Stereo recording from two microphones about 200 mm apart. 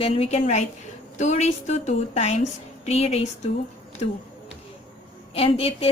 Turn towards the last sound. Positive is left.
turn(degrees=30)  # may be behind; listen again after turning